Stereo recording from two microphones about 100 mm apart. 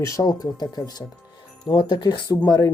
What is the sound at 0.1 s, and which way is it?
Speech, 35° left (ahead or behind).